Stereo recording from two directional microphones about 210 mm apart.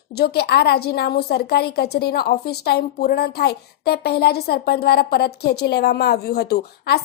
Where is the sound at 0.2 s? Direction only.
50° left (ahead or behind).